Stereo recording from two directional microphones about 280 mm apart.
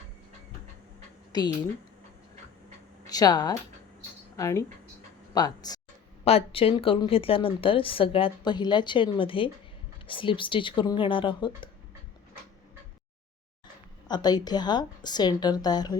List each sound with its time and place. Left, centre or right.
1.3 s speech: centre
3.1 s a woman's voice: centre
14.1 s a woman's voice: centre